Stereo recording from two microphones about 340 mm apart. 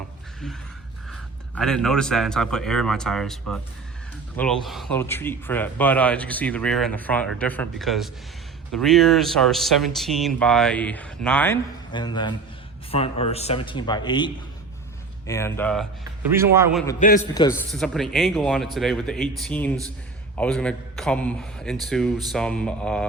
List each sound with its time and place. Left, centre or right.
1.1 s speech: centre
15.3 s a man's voice: centre
17.0 s a man's voice: left
17.5 s speech: centre